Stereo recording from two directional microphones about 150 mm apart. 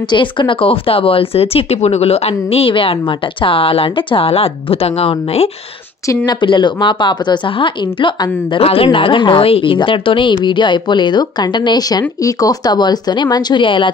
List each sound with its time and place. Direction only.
0.1 s a woman's voice: 35° left (ahead or behind)
6.0 s a woman's voice: 30° left (ahead or behind)